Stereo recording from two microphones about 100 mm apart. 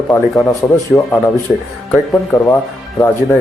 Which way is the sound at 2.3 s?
35° left (ahead or behind).